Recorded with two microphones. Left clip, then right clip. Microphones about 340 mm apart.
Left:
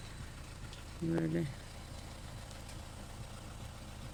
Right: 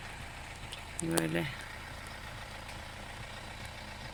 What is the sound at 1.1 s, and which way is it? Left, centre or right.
Speech, right.